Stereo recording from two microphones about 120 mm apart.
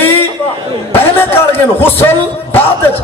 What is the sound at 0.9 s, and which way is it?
Music, 15° left (ahead or behind).